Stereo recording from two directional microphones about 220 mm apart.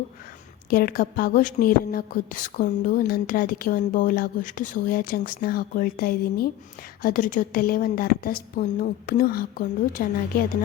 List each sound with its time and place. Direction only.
0.7 s a woman's voice: 40° left (ahead or behind)